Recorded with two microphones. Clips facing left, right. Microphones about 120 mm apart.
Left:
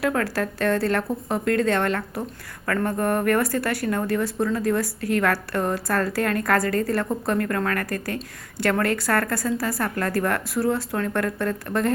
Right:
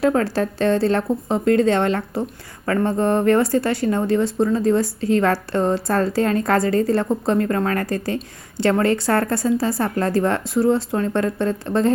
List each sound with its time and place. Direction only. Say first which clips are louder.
0.0 s a woman's voice: right 5 dB; 25° right (ahead or behind)